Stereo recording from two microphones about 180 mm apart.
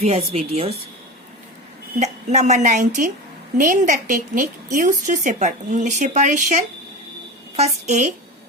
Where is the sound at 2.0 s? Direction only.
40° right (ahead or behind).